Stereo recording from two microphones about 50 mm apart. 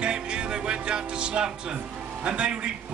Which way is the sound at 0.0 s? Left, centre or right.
Centre.